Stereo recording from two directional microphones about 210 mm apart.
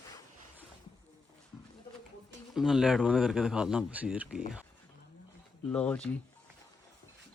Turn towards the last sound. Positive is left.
turn(degrees=5)  # may be behind; listen again after turning